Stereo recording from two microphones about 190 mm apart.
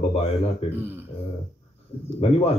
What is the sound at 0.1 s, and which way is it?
Speech, 30° left (ahead or behind).